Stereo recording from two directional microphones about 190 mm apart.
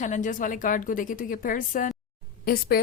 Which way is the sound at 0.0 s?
40° left (ahead or behind).